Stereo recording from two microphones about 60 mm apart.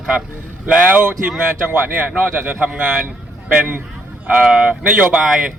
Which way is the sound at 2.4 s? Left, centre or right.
Right.